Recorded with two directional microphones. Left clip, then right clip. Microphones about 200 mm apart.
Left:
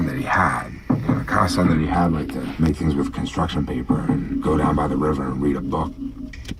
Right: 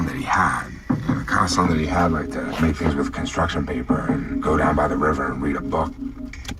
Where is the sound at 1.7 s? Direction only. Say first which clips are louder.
Even; 30° right (ahead or behind).